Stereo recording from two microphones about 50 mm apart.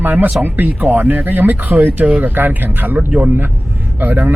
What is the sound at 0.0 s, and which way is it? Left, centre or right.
Speech, right.